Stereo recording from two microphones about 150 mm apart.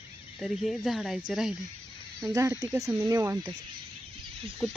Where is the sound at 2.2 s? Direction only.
20° right (ahead or behind).